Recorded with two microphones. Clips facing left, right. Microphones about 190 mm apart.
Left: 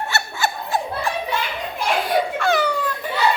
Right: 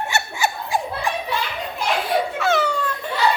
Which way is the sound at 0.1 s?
10° right (ahead or behind).